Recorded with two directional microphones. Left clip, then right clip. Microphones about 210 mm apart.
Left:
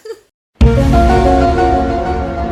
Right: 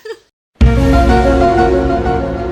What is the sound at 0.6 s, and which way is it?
Music, centre (ahead or behind).